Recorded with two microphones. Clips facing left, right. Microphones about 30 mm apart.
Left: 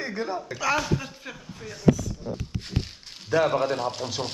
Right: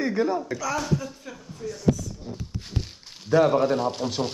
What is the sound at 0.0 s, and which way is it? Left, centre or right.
Speech, centre.